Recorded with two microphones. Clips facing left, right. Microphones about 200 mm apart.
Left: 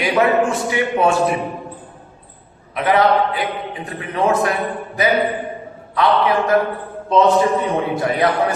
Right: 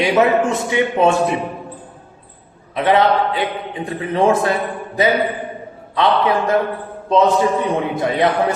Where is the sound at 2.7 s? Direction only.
25° right (ahead or behind).